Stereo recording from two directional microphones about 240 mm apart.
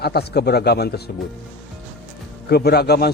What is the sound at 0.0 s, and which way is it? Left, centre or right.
A man's voice, left.